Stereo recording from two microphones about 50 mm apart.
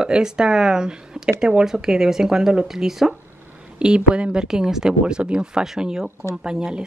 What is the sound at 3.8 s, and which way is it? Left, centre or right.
Speech, centre.